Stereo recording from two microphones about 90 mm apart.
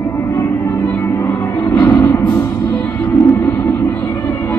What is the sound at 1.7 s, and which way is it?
Music, 25° left (ahead or behind).